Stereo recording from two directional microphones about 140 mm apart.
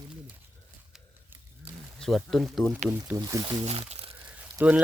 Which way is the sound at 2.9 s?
15° right (ahead or behind).